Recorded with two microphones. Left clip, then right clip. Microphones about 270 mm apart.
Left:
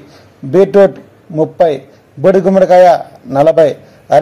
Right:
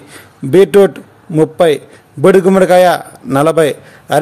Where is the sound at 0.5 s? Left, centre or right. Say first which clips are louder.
Even; right.